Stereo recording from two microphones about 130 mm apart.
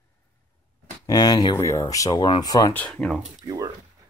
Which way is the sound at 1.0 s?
30° left (ahead or behind).